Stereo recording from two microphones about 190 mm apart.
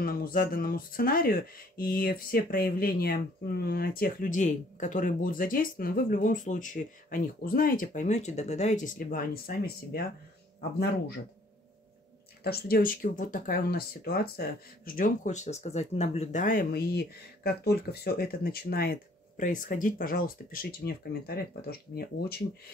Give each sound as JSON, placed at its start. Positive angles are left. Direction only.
{"t": 0.0, "sound": "speech", "side_deg": 50}
{"t": 12.4, "sound": "speech", "side_deg": 50}